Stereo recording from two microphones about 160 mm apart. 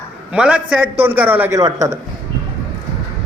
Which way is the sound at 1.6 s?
20° right (ahead or behind).